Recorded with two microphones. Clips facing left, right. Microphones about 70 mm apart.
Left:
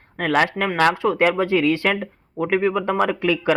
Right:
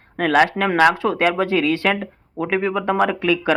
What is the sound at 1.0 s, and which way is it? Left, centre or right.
Speech, centre.